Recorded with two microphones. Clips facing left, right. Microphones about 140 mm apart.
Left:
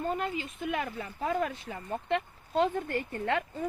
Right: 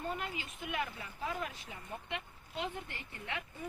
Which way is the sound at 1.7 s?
65° left (ahead or behind).